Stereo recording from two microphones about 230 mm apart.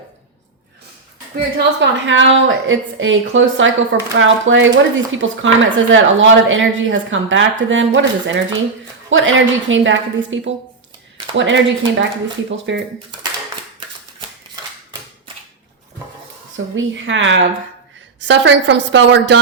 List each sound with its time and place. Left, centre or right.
1.5 s a woman's voice: right
16.7 s a woman's voice: right